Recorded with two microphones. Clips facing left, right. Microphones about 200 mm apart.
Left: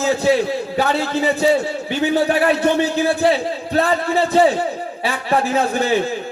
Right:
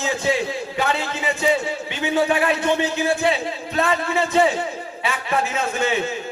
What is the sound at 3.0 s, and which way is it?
A man's voice, 35° left (ahead or behind).